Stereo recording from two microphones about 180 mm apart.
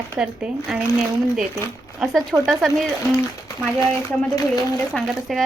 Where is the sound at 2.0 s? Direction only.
Centre (ahead or behind).